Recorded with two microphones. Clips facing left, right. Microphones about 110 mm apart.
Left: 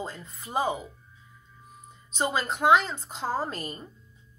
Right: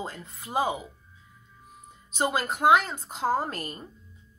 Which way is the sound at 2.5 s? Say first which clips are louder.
Even; 5° right (ahead or behind).